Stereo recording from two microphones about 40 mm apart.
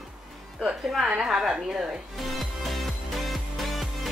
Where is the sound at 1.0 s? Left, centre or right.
Centre.